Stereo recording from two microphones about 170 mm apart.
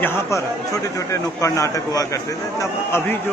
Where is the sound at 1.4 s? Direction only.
20° left (ahead or behind).